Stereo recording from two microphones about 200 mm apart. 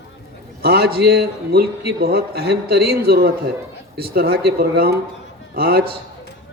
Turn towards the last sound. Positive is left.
turn(degrees=-50)  # may be behind; listen again after turning